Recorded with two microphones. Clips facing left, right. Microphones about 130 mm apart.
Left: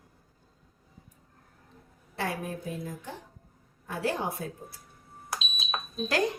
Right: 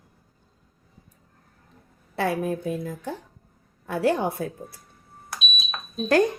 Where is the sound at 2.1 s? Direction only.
60° right (ahead or behind).